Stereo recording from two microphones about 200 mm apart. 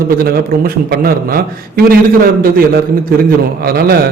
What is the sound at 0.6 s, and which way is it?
A man's voice, 50° right (ahead or behind).